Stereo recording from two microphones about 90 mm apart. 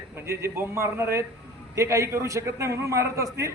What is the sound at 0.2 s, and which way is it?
A man's voice, 25° right (ahead or behind).